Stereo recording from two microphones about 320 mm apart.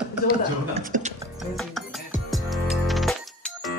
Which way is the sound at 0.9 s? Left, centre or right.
Right.